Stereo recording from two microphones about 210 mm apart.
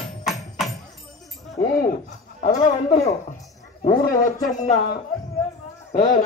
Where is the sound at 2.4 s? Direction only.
35° left (ahead or behind).